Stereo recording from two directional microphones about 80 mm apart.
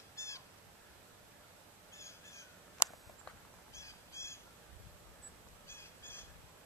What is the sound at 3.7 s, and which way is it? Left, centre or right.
Honk, left.